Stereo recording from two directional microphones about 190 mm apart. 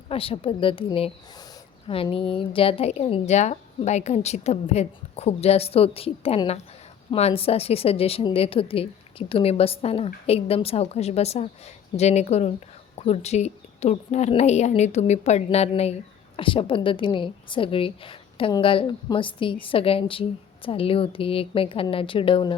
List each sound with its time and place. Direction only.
0.1 s a woman's voice: 30° left (ahead or behind)